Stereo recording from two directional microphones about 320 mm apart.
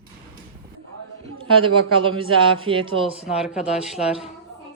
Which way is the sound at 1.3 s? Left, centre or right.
Centre.